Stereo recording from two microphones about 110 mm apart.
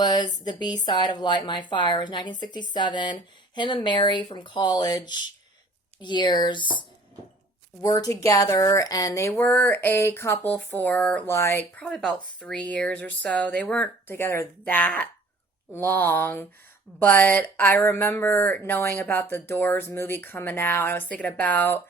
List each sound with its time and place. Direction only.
0.0 s a woman's voice: 40° left (ahead or behind); by 11.3 s 10° left (ahead or behind)
11.3 s speech: 25° left (ahead or behind)
11.8 s speech: 5° left (ahead or behind)
14.1 s speech: 25° left (ahead or behind)